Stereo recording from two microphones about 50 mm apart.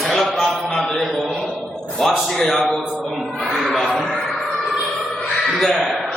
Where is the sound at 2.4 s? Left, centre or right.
Centre.